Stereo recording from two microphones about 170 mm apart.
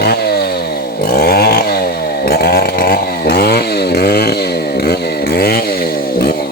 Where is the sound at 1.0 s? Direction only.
60° left (ahead or behind).